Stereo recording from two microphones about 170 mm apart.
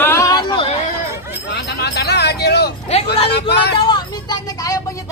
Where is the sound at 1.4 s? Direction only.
80° left.